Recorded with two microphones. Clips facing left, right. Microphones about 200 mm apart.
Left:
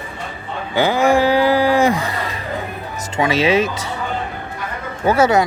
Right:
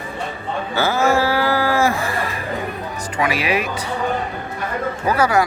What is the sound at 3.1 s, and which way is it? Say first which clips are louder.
Speech: left 5 dB; 25° left (ahead or behind).